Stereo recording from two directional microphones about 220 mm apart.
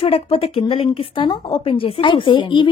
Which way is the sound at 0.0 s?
25° left (ahead or behind).